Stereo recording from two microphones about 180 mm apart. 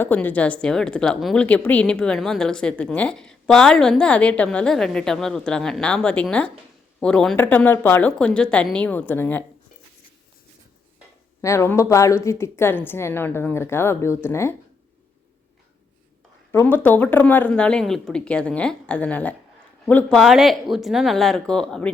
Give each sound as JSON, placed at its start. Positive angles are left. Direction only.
{"t": 0.0, "sound": "a woman's voice", "side_deg": 10}
{"t": 11.4, "sound": "a woman's voice", "side_deg": 15}
{"t": 16.5, "sound": "a woman's voice", "side_deg": 10}